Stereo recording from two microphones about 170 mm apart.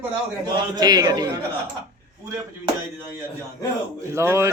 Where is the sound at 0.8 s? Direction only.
25° right (ahead or behind).